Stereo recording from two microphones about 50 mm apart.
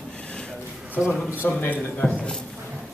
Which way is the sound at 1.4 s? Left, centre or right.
Left.